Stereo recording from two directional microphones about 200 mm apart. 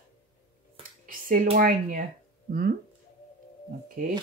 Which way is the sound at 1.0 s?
45° right (ahead or behind).